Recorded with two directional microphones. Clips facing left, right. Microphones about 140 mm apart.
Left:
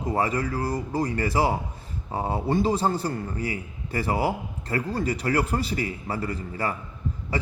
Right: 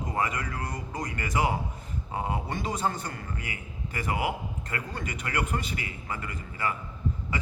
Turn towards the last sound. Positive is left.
turn(degrees=35)  # may be behind; listen again after turning